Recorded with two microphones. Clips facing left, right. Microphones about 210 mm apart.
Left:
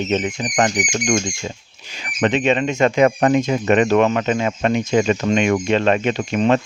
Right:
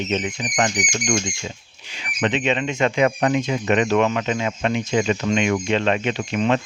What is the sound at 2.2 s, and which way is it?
Speech, 45° left (ahead or behind).